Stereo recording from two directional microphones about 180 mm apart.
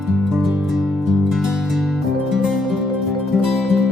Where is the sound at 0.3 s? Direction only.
Centre (ahead or behind).